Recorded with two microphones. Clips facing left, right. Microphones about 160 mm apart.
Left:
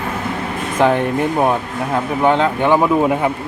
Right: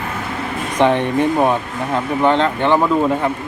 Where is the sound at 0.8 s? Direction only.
5° left (ahead or behind).